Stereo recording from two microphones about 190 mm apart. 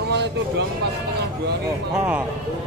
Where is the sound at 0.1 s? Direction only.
65° right (ahead or behind).